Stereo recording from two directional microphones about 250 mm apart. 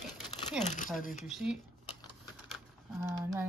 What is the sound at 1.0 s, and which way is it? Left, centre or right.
Speech, left.